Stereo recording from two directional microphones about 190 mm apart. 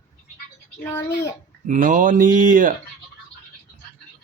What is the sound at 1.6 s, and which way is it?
Speech, 45° right (ahead or behind).